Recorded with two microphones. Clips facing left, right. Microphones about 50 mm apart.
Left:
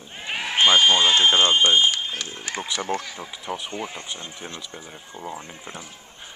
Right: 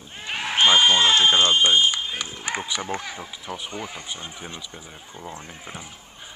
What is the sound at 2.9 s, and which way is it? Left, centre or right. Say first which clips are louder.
Speech: left 1 dB; centre.